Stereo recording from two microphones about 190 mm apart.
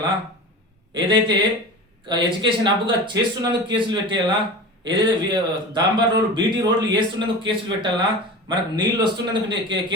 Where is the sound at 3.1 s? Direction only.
20° right (ahead or behind).